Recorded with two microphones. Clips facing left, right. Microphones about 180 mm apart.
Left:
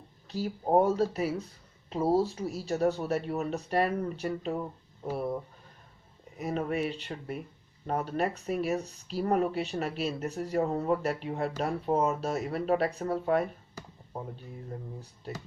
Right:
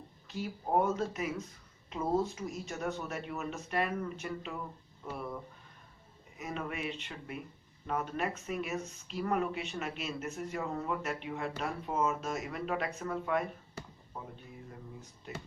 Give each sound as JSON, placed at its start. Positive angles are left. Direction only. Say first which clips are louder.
{"t": 0.3, "sound": "speech", "louder": "left 6 dB", "side_deg": 35}